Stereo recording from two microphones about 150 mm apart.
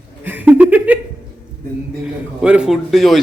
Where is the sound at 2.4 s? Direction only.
10° right (ahead or behind).